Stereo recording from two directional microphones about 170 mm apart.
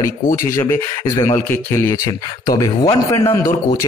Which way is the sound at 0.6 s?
15° left (ahead or behind).